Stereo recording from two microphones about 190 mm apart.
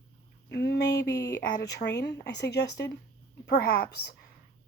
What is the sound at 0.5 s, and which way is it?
Speech, 60° left (ahead or behind).